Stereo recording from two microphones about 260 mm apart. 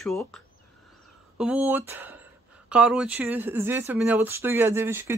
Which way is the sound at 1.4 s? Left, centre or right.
Centre.